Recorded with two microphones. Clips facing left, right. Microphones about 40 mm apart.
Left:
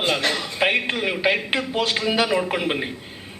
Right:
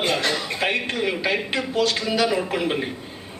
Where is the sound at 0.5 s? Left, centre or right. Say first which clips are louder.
Left 2 dB; centre.